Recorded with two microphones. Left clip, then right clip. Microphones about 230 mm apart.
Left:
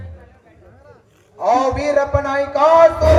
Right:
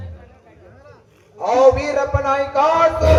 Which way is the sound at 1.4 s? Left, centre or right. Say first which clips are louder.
Right 2 dB; left.